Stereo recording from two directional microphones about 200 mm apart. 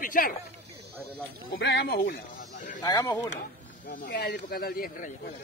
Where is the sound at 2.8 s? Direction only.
15° left (ahead or behind).